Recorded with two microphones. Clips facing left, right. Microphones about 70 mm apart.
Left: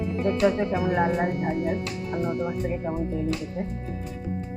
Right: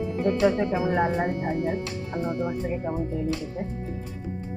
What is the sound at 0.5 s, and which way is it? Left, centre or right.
Speech, right.